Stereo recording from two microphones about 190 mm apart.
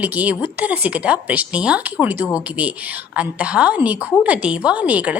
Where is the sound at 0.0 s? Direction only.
10° right (ahead or behind).